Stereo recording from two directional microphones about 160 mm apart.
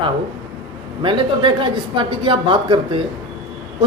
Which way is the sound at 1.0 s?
30° right (ahead or behind).